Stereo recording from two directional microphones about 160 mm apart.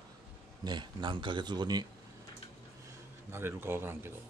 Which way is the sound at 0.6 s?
30° right (ahead or behind).